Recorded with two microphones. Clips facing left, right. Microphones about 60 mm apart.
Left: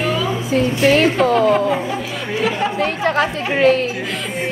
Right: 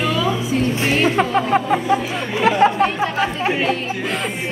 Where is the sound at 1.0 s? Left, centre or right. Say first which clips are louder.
Left 3 dB; right.